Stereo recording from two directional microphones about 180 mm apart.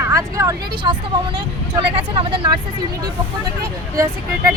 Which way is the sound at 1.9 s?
30° right (ahead or behind).